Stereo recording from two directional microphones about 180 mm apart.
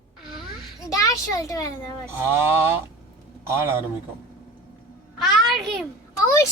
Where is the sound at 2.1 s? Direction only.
15° right (ahead or behind).